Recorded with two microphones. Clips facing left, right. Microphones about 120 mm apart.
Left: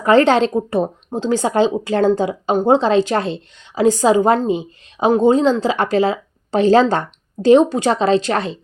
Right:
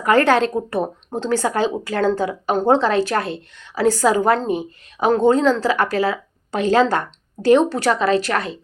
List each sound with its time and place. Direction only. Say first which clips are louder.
0.0 s speech: left 3 dB; 25° left (ahead or behind)